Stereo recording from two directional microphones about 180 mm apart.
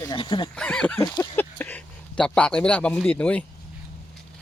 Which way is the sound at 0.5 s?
5° left (ahead or behind).